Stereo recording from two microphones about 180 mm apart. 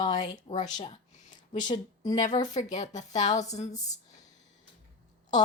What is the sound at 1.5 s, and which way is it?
Speech, 25° left (ahead or behind).